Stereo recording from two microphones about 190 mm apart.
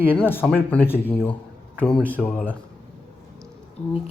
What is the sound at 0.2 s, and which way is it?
Speech, 10° left (ahead or behind).